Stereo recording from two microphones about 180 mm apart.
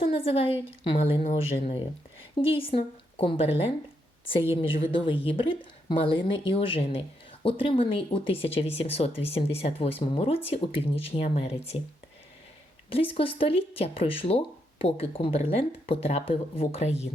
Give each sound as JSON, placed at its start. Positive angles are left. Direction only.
{"t": 0.0, "sound": "speech", "side_deg": 30}
{"t": 4.5, "sound": "speech", "side_deg": 30}
{"t": 12.9, "sound": "speech", "side_deg": 30}